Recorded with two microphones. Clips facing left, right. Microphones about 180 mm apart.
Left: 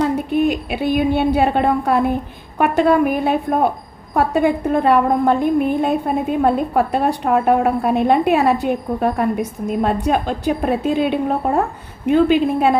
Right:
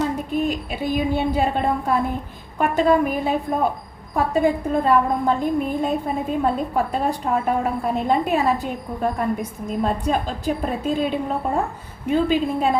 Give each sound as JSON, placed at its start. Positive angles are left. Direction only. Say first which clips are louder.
{"t": 0.0, "sound": "a woman's voice", "louder": "left 5 dB", "side_deg": 70}